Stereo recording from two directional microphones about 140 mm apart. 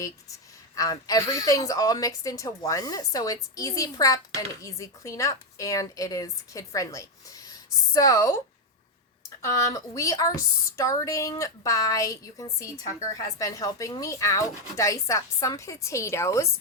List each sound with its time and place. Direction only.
0.8 s speech: 25° left (ahead or behind)
9.4 s speech: 25° left (ahead or behind)